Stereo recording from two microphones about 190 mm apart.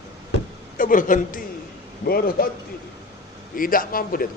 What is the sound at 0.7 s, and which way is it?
Speech, 45° left (ahead or behind).